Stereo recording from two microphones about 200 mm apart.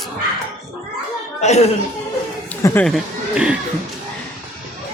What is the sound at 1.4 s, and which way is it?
Speech, 35° left (ahead or behind).